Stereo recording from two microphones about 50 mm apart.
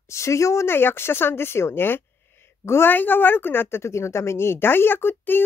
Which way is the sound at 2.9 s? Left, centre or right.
Left.